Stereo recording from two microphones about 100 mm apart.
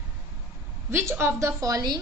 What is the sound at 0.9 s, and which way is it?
A woman's voice, 25° right (ahead or behind).